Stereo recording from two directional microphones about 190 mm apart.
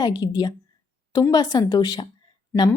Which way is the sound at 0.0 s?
20° left (ahead or behind).